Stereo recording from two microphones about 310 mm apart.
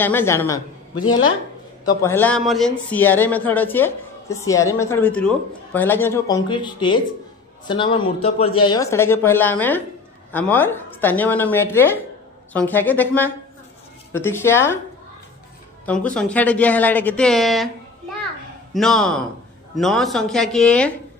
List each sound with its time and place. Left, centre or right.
0.0 s a man's voice: centre
15.8 s a woman's voice: centre
18.7 s a man's voice: centre